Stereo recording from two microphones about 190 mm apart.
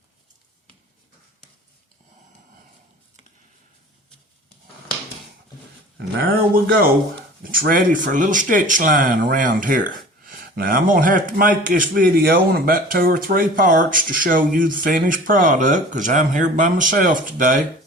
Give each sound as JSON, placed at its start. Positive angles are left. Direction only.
{"t": 6.0, "sound": "a man's voice", "side_deg": -50}